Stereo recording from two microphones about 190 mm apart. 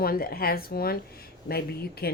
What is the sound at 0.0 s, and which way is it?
A woman's voice, 50° left (ahead or behind).